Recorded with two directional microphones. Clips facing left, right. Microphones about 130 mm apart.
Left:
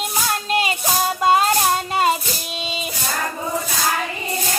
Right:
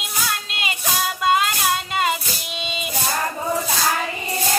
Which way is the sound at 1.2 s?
40° left (ahead or behind).